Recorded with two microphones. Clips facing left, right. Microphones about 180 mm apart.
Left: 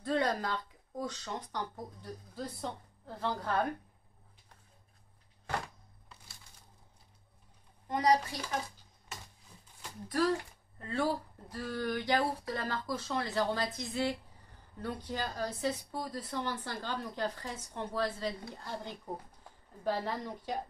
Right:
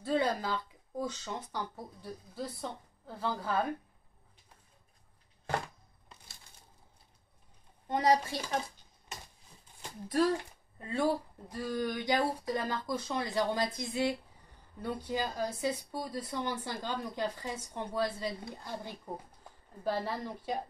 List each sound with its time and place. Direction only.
0.0 s speech: 5° right (ahead or behind)
7.9 s a woman's voice: 25° right (ahead or behind)
9.8 s a sound: 25° right (ahead or behind)
10.8 s speech: 15° right (ahead or behind)